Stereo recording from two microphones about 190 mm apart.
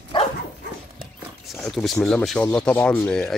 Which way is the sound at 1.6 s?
5° left (ahead or behind).